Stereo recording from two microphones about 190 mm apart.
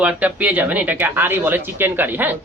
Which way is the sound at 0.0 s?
5° right (ahead or behind).